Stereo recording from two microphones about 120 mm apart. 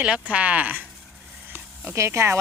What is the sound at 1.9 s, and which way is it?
Speech, 20° right (ahead or behind).